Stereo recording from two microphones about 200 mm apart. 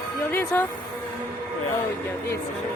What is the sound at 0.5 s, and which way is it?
Speech, 10° left (ahead or behind).